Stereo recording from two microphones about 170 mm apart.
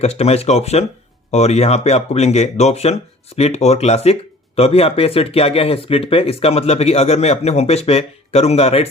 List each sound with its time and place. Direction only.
0.0 s speech: 40° left (ahead or behind)